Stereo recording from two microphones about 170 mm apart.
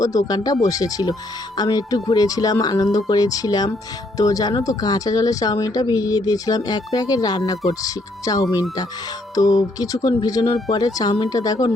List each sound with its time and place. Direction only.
0.0 s speech: 20° left (ahead or behind)